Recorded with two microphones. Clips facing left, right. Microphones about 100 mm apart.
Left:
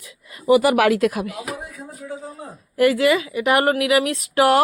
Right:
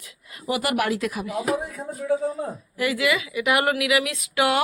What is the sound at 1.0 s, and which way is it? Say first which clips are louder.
Speech: left 7 dB; 60° left (ahead or behind).